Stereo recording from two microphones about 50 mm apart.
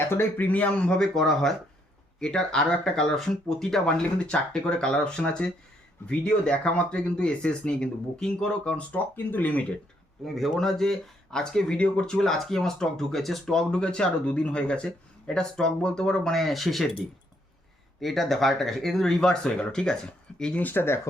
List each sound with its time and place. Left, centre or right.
0.1 s speech: left
0.4 s speech: left
10.2 s speech: centre
18.0 s speech: centre
20.6 s speech: left
20.8 s speech: left